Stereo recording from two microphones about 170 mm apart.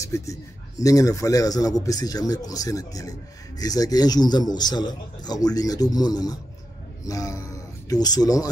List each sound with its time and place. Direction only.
0.0 s speech: 20° left (ahead or behind)